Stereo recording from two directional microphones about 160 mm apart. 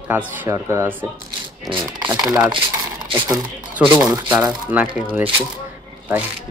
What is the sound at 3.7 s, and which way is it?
Speech, 10° right (ahead or behind).